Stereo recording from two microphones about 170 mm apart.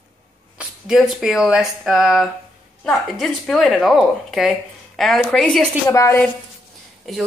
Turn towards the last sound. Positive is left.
turn(degrees=0)  # may be behind; listen again after turning